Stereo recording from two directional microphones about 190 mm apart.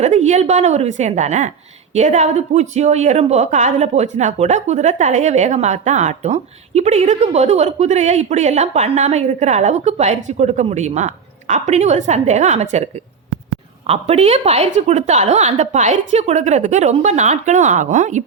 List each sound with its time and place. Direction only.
0.0 s a woman's voice: 35° right (ahead or behind)